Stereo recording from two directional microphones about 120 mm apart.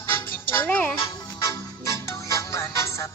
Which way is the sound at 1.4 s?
25° left (ahead or behind).